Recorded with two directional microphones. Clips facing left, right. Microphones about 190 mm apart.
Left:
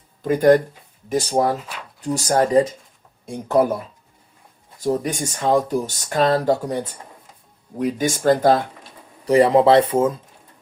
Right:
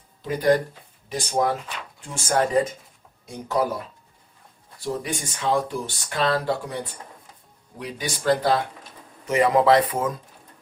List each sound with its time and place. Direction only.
0.2 s speech: 50° left (ahead or behind)
1.1 s speech: 35° left (ahead or behind)
1.6 s speech: 5° left (ahead or behind)
2.0 s speech: 40° left (ahead or behind)
3.2 s speech: 55° left (ahead or behind)
4.8 s speech: 40° left (ahead or behind)
7.8 s speech: 45° left (ahead or behind)
9.2 s speech: 35° left (ahead or behind)